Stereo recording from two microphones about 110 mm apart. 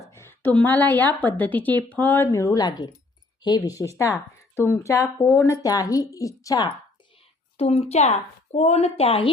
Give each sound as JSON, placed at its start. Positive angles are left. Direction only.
{"t": 0.1, "sound": "a woman's voice", "side_deg": 20}
{"t": 4.5, "sound": "speech", "side_deg": 20}
{"t": 7.5, "sound": "a woman's voice", "side_deg": 70}